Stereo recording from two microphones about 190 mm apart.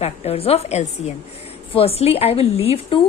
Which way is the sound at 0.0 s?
30° left (ahead or behind).